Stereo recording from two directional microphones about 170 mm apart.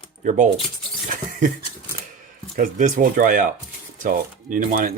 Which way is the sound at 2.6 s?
50° right (ahead or behind).